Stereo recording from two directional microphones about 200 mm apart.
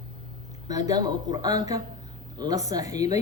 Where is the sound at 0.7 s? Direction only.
20° right (ahead or behind).